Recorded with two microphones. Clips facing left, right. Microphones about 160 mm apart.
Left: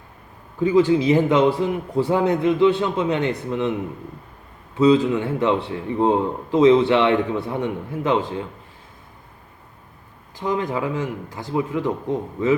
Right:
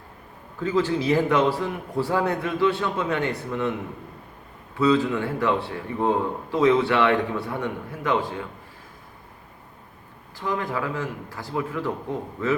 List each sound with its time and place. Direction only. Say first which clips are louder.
0.6 s a man's voice: left 7 dB; 15° left (ahead or behind)
4.8 s a man's voice: left 5 dB; 20° left (ahead or behind)
10.3 s a man's voice: left 4 dB; 20° left (ahead or behind)